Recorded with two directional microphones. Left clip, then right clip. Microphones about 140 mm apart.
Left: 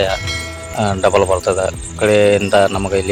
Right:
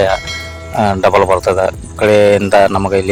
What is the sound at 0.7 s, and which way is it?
Speech, 30° right (ahead or behind).